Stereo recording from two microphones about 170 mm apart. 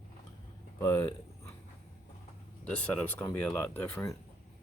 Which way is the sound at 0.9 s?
15° left (ahead or behind).